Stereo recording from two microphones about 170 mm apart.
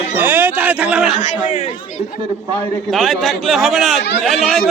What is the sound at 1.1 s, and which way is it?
Speech, 40° left (ahead or behind).